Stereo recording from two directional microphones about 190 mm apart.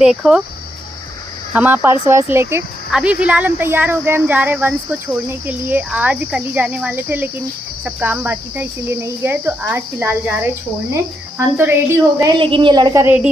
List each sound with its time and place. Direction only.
0.0 s speech: 5° right (ahead or behind)
1.5 s speech: 10° right (ahead or behind)
12.2 s a woman's voice: 25° right (ahead or behind); by 13.3 s 10° right (ahead or behind)